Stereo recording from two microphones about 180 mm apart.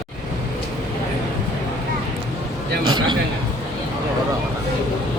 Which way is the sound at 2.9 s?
25° right (ahead or behind).